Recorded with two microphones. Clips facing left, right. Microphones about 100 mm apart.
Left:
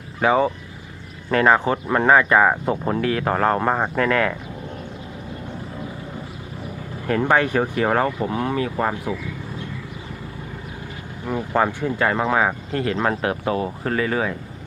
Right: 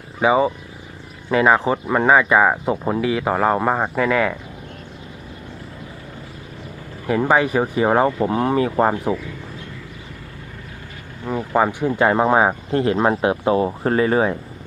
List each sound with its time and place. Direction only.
0.2 s speech: 5° right (ahead or behind)
7.1 s speech: 10° right (ahead or behind); by 9.1 s 30° right (ahead or behind)
11.3 s speech: 10° right (ahead or behind); by 14.3 s 30° right (ahead or behind)